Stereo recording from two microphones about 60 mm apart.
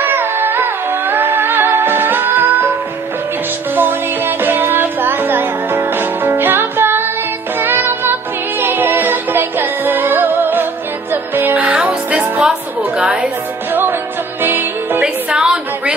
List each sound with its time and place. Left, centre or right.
0.0 s music: right
3.7 s music: right
11.7 s music: centre
12.4 s a sound: centre
14.4 s music: right
15.2 s a sound: centre